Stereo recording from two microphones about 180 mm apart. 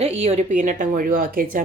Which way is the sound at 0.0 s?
35° right (ahead or behind).